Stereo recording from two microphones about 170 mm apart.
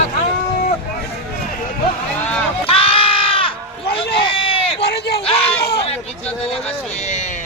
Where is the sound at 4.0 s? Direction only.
30° left (ahead or behind).